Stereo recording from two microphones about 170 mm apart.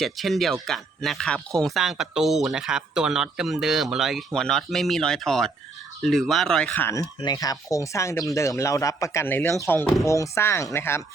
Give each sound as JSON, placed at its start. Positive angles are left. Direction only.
{"t": 0.0, "sound": "speech", "side_deg": 0}
{"t": 7.2, "sound": "speech", "side_deg": 25}